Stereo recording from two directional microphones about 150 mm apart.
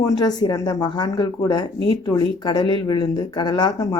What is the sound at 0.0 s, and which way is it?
Speech, 25° left (ahead or behind).